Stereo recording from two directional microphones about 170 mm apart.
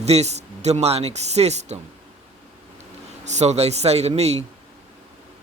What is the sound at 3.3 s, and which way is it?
A man's voice, 40° right (ahead or behind).